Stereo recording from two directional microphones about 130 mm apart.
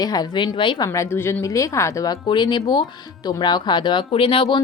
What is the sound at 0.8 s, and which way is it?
A woman's voice, 20° left (ahead or behind).